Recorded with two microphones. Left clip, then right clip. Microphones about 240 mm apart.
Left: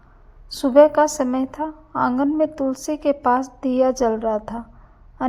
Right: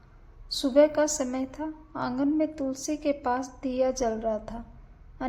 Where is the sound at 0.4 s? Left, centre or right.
Left.